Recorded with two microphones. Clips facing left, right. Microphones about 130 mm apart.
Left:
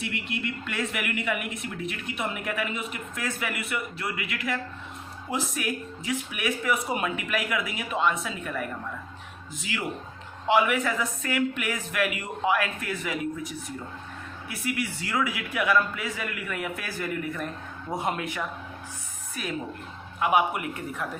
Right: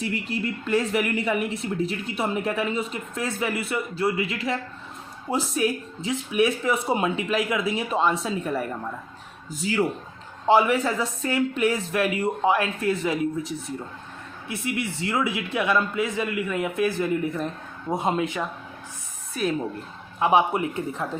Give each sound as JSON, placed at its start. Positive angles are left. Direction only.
{"t": 0.0, "sound": "a woman's voice", "side_deg": -35}
{"t": 20.1, "sound": "a woman's voice", "side_deg": -30}